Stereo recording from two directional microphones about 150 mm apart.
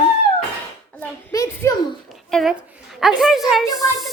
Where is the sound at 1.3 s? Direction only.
20° left (ahead or behind).